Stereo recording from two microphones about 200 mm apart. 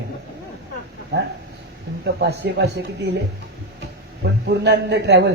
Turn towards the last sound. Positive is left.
turn(degrees=-60)  # may be behind; listen again after turning